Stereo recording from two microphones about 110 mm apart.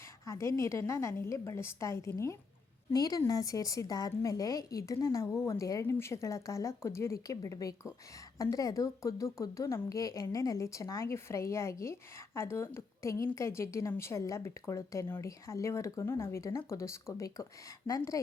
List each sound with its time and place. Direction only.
0.3 s speech: 25° left (ahead or behind)